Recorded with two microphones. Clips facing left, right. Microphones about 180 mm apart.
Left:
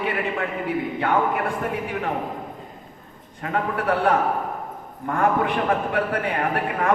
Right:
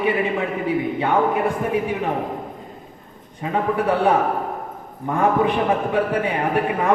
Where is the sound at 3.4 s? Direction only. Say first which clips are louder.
Right 3 dB; 15° right (ahead or behind).